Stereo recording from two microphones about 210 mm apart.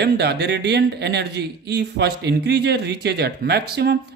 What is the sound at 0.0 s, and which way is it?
Speech, 55° right (ahead or behind).